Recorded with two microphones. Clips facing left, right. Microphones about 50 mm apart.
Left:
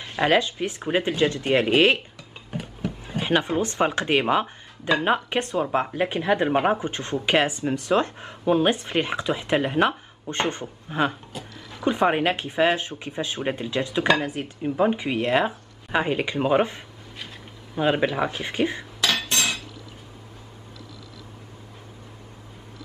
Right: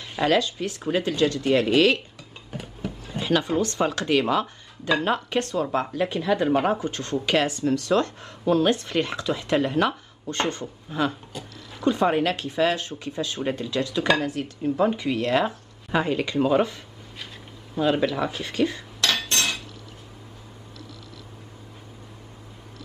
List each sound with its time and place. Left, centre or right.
0.2 s speech: left
2.5 s a sound: centre
3.1 s speech: left
18.9 s cutlery: centre